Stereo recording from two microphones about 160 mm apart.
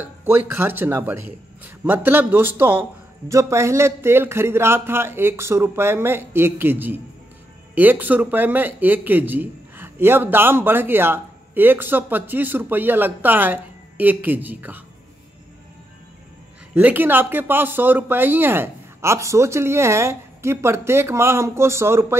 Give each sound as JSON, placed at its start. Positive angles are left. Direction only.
{"t": 0.2, "sound": "speech", "side_deg": -15}
{"t": 16.7, "sound": "speech", "side_deg": -10}